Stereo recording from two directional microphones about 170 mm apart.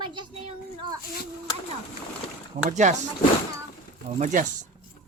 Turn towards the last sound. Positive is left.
turn(degrees=-50)  # may be behind; listen again after turning